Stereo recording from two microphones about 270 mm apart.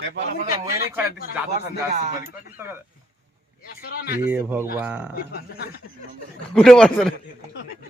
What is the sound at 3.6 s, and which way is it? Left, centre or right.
Speech, left.